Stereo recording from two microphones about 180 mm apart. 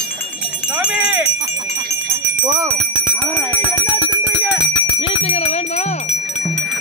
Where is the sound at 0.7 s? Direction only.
5° right (ahead or behind).